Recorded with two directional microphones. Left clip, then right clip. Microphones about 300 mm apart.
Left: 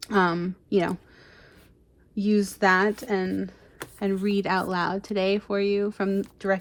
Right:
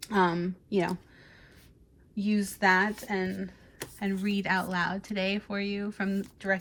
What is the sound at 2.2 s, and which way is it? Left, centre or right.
Speech, left.